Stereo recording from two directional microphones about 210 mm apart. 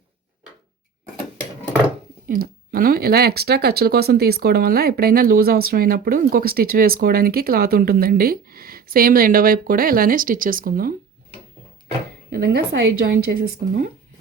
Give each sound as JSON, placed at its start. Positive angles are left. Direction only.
{"t": 2.2, "sound": "speech", "side_deg": -45}
{"t": 12.3, "sound": "speech", "side_deg": -55}